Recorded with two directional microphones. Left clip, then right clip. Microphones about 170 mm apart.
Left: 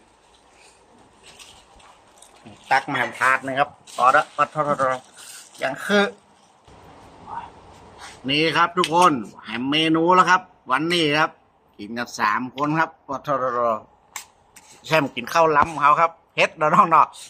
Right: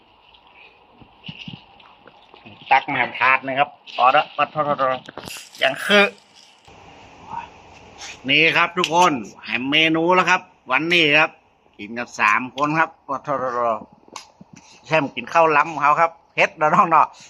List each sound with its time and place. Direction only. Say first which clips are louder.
2.6 s a man's voice: right 3 dB; 15° left (ahead or behind)
5.5 s speech: right 5 dB; 5° right (ahead or behind)
8.3 s a man's voice: right 3 dB; 20° left (ahead or behind)
12.2 s a man's voice: right 4 dB; 15° left (ahead or behind)
14.8 s a man's voice: even; 20° left (ahead or behind)